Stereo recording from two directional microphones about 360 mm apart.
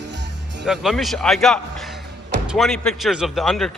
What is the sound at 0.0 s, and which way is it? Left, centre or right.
Music, right.